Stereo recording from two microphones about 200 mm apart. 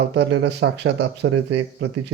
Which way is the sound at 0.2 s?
65° right (ahead or behind).